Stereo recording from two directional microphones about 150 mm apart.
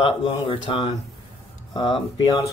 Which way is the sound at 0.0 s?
35° left (ahead or behind).